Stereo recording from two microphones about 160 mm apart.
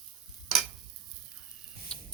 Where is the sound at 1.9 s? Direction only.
5° left (ahead or behind).